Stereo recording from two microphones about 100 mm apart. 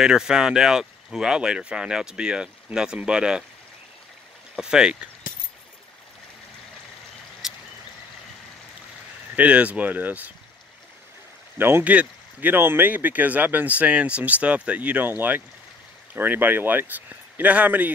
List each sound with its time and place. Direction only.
0.0 s speech: 5° right (ahead or behind)
4.6 s speech: 5° right (ahead or behind)
7.4 s a sound: 5° right (ahead or behind)
9.3 s speech: 15° right (ahead or behind)
11.5 s speech: 20° right (ahead or behind)